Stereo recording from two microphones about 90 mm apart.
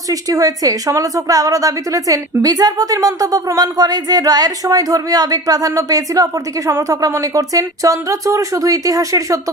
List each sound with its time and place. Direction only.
0.1 s a woman's voice: 40° right (ahead or behind)